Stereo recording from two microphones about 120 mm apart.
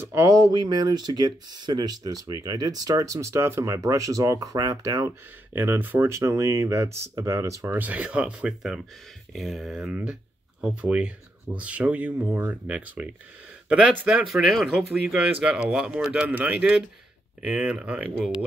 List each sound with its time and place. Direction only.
0.0 s speech: 25° right (ahead or behind)
5.5 s speech: 15° right (ahead or behind)